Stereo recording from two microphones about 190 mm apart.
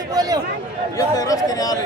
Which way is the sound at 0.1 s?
20° right (ahead or behind).